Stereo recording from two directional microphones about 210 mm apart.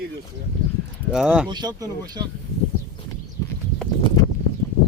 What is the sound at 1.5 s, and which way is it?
Speech, 20° right (ahead or behind).